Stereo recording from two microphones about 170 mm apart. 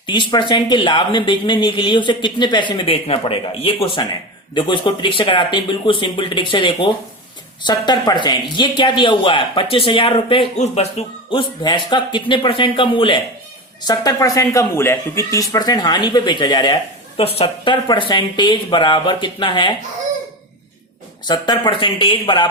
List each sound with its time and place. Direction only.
0.0 s a woman's voice: 30° left (ahead or behind)
21.2 s speech: 25° left (ahead or behind)